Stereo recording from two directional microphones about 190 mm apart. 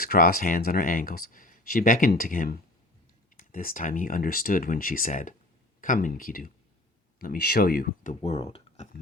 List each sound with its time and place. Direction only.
0.0 s speech: 50° left (ahead or behind)
8.2 s speech: 30° left (ahead or behind)